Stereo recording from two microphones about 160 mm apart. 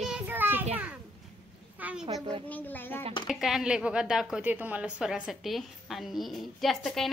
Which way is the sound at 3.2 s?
Centre (ahead or behind).